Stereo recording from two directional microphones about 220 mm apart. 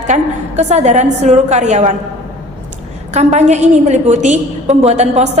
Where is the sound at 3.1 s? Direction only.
30° right (ahead or behind).